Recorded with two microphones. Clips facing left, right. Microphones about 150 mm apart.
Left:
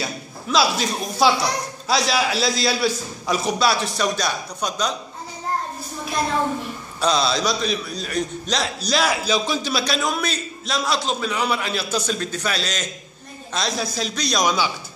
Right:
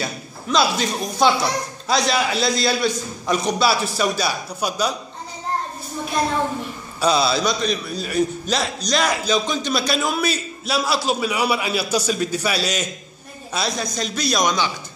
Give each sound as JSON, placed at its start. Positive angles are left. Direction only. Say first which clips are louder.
{"t": 0.0, "sound": "a man's voice", "louder": "right 1 dB", "side_deg": 0}
{"t": 7.0, "sound": "a man's voice", "louder": "right 2 dB", "side_deg": -5}